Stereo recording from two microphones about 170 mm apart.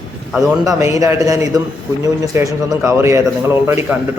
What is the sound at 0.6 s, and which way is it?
A man's voice, 20° right (ahead or behind).